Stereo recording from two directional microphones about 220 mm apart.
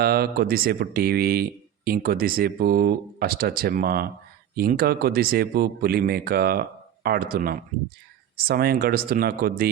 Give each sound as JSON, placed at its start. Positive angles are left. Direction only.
{"t": 0.0, "sound": "speech", "side_deg": -45}